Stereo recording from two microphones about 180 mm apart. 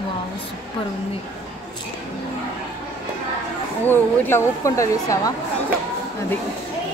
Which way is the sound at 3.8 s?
10° left (ahead or behind).